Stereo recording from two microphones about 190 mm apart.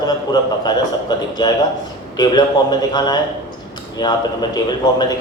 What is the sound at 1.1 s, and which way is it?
A man's voice, 20° left (ahead or behind).